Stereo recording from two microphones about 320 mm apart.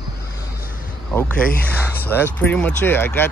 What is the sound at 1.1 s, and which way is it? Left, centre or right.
Speech, centre.